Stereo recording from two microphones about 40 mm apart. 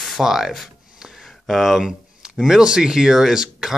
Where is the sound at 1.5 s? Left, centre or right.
Centre.